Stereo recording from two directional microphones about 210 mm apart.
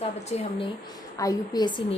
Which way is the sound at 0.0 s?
30° left (ahead or behind).